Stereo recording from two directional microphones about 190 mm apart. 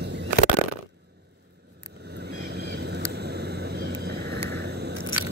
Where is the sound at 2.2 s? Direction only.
60° right (ahead or behind).